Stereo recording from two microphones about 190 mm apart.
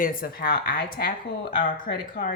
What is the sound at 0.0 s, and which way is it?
Speech, 50° left (ahead or behind).